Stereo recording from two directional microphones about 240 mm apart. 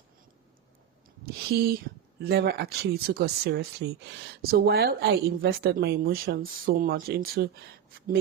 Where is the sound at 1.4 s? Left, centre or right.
Right.